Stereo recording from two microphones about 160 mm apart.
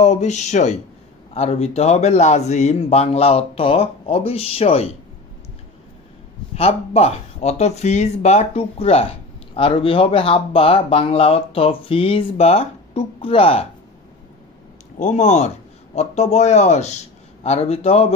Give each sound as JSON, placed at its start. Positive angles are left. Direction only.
{"t": 0.0, "sound": "speech", "side_deg": 45}
{"t": 6.5, "sound": "speech", "side_deg": 40}
{"t": 15.0, "sound": "a man's voice", "side_deg": 50}